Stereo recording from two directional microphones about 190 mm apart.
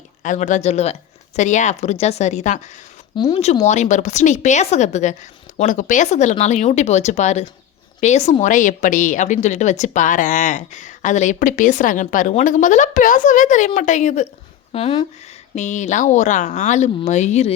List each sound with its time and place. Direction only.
0.2 s a woman's voice: 40° left (ahead or behind)